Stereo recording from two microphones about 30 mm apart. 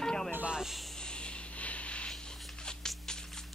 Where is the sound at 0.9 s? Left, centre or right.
Left.